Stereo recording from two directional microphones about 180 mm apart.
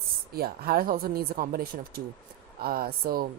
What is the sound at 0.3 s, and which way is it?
Speech, 60° right (ahead or behind).